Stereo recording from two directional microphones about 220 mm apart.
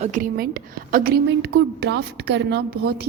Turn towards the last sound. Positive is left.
turn(degrees=-45)  # may be behind; listen again after turning